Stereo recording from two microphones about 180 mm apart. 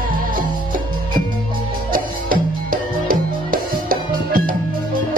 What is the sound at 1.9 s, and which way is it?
Music, 50° right (ahead or behind).